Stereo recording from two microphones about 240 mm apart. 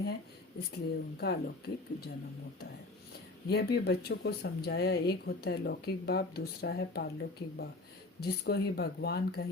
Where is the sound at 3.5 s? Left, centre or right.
Left.